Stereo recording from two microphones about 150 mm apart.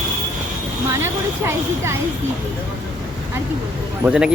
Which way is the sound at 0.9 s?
15° right (ahead or behind).